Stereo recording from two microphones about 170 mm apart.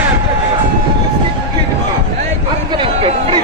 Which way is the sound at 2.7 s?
30° right (ahead or behind).